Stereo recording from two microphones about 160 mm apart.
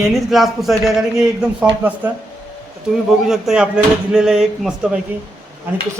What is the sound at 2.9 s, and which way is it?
A man's voice, 5° right (ahead or behind).